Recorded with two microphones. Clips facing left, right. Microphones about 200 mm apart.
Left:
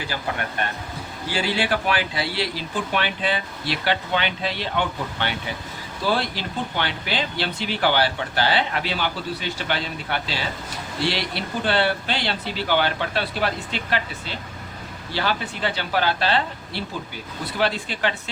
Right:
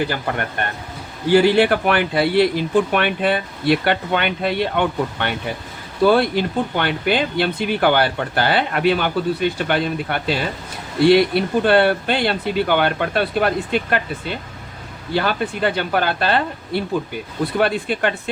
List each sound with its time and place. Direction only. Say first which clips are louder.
0.0 s speech: right 6 dB; 55° right (ahead or behind)